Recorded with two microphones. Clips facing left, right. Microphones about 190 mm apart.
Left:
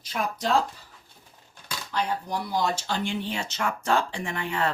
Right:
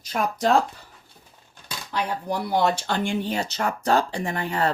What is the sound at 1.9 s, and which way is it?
Speech, 65° right (ahead or behind).